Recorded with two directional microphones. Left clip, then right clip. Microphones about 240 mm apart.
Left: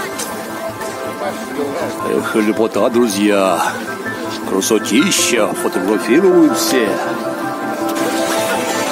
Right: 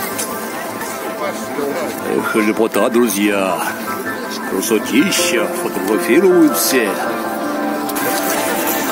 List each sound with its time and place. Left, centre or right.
2.3 s speech: centre
2.7 s speech: centre
3.2 s speech: centre
6.0 s speech: centre